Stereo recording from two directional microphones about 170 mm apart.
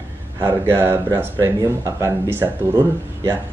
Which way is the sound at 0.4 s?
15° right (ahead or behind).